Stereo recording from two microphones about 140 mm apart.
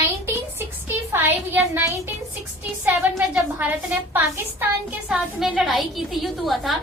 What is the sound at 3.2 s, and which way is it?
A woman's voice, 10° right (ahead or behind).